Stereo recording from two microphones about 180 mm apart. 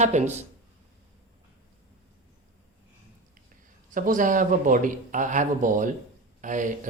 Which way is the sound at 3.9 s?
45° right (ahead or behind).